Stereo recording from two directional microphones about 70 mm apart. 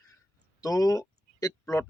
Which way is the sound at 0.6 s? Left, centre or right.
Left.